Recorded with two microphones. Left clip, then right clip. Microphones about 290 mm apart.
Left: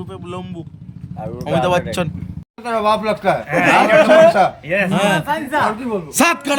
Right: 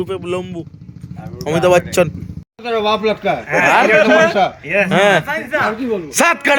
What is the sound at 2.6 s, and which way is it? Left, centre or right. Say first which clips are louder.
A man's voice: right 1 dB; centre.